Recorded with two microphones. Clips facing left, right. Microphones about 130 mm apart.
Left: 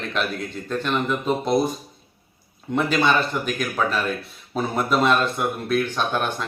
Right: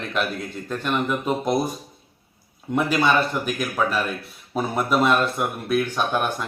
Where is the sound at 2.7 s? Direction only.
5° right (ahead or behind).